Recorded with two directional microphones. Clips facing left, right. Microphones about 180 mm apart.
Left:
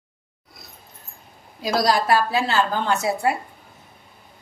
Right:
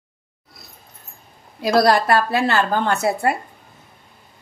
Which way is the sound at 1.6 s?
60° right (ahead or behind).